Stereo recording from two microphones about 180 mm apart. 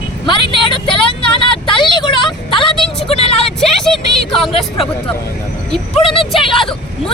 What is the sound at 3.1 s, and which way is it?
Vehicle, 30° left (ahead or behind).